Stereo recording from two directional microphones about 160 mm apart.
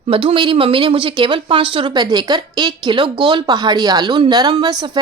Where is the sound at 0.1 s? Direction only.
35° right (ahead or behind).